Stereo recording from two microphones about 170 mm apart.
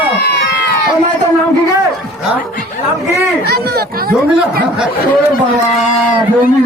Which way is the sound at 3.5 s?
65° right (ahead or behind).